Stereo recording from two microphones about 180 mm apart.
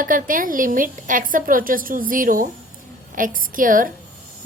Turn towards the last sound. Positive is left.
turn(degrees=-50)  # may be behind; listen again after turning